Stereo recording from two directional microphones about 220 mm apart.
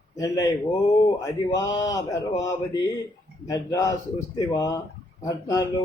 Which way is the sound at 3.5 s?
15° left (ahead or behind).